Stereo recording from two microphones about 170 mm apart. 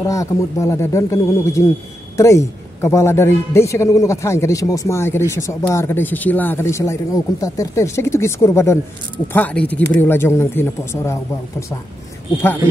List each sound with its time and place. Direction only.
0.0 s a man's voice: 20° left (ahead or behind)